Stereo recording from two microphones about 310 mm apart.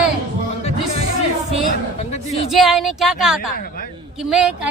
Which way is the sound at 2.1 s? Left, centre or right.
Left.